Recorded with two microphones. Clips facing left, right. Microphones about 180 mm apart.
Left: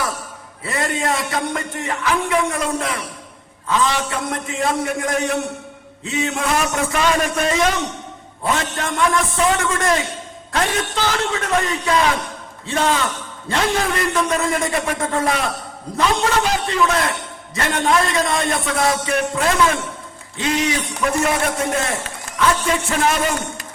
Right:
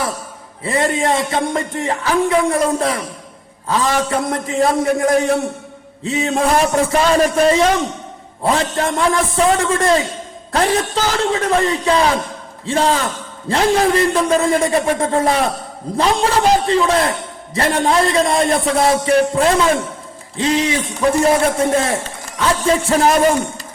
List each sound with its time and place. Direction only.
0.6 s a man's voice: 25° right (ahead or behind)